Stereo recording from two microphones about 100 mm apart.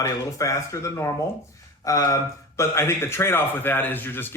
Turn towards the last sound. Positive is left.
turn(degrees=20)  # may be behind; listen again after turning